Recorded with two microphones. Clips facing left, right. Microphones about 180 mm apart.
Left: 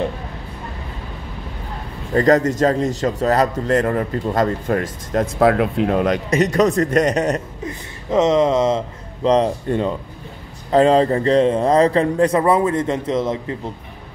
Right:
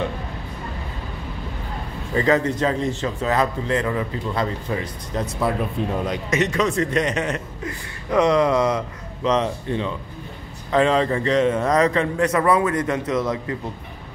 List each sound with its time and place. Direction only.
2.1 s a man's voice: 40° left (ahead or behind)
5.4 s speech: 85° left; by 6.2 s 70° left (ahead or behind)
6.3 s a man's voice: 40° left (ahead or behind)
7.6 s a man's voice: 20° left (ahead or behind)